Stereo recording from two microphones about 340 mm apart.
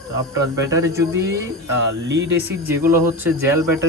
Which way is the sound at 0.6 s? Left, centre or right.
Centre.